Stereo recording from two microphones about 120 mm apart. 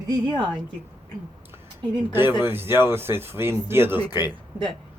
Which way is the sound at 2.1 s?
20° right (ahead or behind).